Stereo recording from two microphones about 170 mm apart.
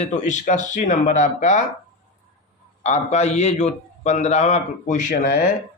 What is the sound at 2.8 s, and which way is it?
A man's voice, 40° left (ahead or behind).